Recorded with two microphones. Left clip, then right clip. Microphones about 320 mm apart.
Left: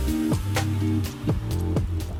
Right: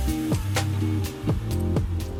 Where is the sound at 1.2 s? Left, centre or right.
Centre.